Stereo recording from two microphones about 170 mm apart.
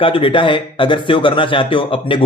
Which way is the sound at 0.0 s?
30° left (ahead or behind).